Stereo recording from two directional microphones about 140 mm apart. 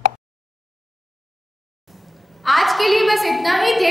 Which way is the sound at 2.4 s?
Centre (ahead or behind).